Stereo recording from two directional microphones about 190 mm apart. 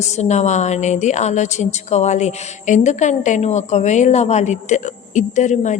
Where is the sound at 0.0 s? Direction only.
35° left (ahead or behind).